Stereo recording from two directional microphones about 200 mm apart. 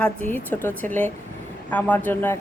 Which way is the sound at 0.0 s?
10° left (ahead or behind).